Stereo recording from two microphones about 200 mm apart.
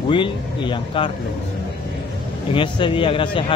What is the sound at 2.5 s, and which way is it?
Speech, 25° left (ahead or behind).